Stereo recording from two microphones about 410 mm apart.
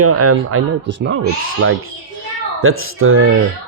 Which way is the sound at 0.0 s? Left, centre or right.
Right.